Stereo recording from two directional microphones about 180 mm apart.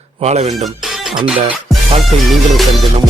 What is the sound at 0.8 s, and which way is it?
Music, centre (ahead or behind).